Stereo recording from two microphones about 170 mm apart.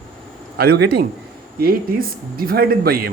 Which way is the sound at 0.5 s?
70° right (ahead or behind).